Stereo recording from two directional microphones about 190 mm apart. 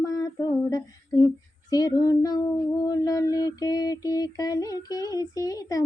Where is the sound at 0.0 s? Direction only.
20° left (ahead or behind).